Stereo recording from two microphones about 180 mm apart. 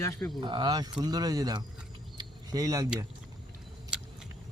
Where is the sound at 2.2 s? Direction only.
20° right (ahead or behind).